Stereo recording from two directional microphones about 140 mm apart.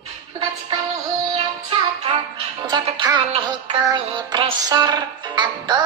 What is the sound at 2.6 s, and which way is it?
Music, 30° right (ahead or behind).